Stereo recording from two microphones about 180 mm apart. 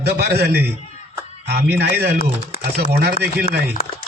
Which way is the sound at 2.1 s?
55° left (ahead or behind).